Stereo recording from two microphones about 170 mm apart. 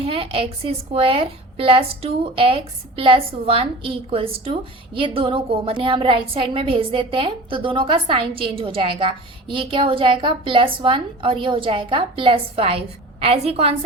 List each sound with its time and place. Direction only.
0.0 s a woman's voice: 35° right (ahead or behind)